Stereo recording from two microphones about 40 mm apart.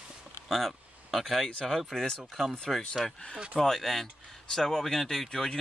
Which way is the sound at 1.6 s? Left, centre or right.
Centre.